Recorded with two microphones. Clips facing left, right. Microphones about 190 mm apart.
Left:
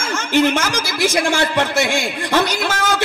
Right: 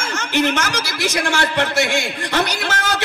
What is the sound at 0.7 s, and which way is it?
A man's voice, 50° left (ahead or behind).